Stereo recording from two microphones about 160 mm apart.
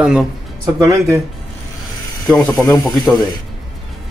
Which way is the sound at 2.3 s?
20° left (ahead or behind).